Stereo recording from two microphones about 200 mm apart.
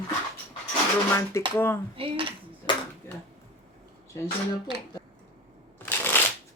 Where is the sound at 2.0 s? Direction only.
25° right (ahead or behind).